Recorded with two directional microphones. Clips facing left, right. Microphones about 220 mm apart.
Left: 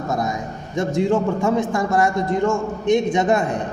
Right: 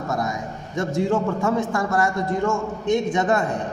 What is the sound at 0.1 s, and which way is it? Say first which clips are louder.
A man's voice: left 2 dB; 20° left (ahead or behind).